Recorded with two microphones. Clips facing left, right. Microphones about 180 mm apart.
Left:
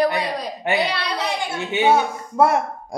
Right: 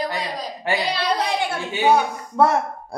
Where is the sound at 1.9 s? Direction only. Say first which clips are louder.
Right 1 dB; 10° left (ahead or behind).